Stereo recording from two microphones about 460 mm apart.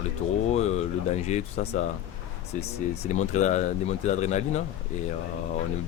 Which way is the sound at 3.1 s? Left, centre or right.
Centre.